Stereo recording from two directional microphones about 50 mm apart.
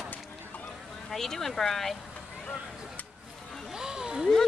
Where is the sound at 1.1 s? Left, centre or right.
Centre.